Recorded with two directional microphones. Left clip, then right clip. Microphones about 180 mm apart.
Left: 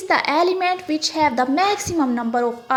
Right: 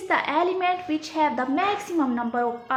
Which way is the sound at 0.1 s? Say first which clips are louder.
Left 5 dB; 40° left (ahead or behind).